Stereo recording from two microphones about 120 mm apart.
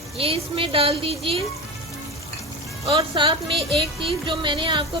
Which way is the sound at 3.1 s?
40° right (ahead or behind).